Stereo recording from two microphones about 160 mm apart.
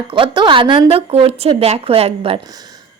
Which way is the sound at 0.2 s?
30° right (ahead or behind).